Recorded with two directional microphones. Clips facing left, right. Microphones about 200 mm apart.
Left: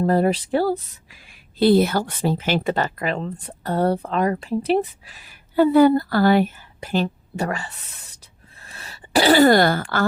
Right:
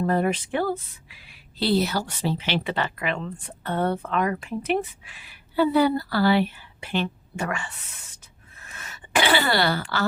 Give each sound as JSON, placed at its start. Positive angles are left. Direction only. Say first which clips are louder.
{"t": 0.0, "sound": "speech", "louder": "left 4 dB", "side_deg": 35}